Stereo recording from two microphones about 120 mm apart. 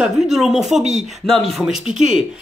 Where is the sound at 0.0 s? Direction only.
5° right (ahead or behind).